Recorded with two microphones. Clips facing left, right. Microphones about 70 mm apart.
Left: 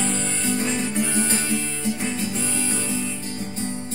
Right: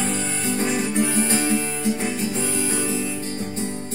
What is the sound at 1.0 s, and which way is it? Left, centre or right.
Music, right.